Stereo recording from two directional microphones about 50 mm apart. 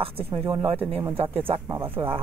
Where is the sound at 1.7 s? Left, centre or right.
Right.